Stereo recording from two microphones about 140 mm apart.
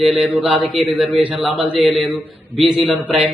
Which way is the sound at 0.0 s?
Centre (ahead or behind).